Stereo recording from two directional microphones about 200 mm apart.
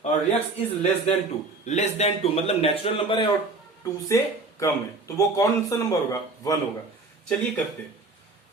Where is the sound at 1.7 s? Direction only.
35° left (ahead or behind); by 6.5 s 15° left (ahead or behind).